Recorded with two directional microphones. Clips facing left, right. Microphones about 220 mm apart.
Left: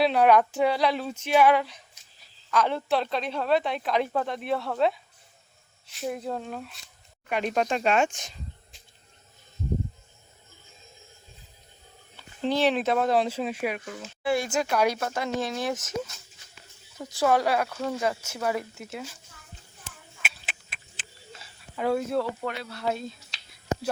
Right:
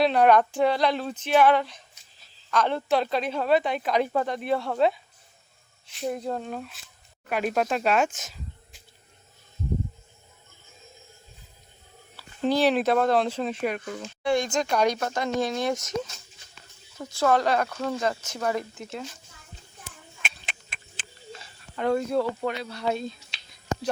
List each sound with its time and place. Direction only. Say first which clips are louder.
0.0 s speech: right 1 dB; 5° left (ahead or behind)
5.9 s speech: right 2 dB; centre (ahead or behind)
12.4 s speech: right 2 dB; 40° right (ahead or behind)
12.7 s speech: right 2 dB; centre (ahead or behind)
20.2 s a sound: even; 5° left (ahead or behind)